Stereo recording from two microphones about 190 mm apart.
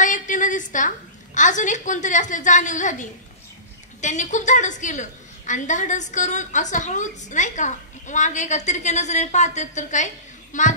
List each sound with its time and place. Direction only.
0.0 s a woman's voice: 45° left (ahead or behind)